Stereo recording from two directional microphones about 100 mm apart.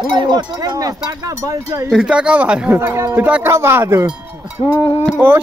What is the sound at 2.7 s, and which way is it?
Speech, 25° right (ahead or behind).